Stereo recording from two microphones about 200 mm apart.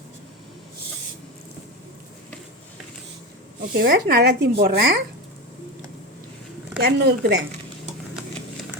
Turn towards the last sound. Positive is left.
turn(degrees=-50)  # may be behind; listen again after turning